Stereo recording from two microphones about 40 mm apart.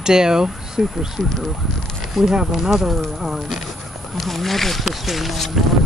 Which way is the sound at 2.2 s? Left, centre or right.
Centre.